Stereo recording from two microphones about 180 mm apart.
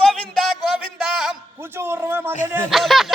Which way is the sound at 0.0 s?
Centre (ahead or behind).